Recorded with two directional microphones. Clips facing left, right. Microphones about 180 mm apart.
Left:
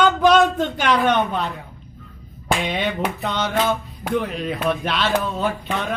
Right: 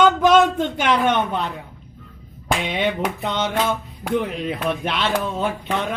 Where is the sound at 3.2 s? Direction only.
20° right (ahead or behind).